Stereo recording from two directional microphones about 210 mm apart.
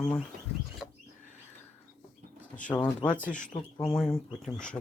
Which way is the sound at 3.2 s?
35° left (ahead or behind).